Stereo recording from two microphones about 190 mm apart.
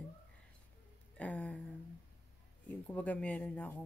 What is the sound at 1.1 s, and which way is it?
Speech, 10° left (ahead or behind).